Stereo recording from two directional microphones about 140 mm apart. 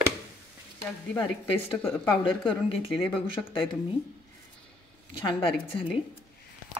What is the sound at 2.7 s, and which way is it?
Speech, 40° left (ahead or behind).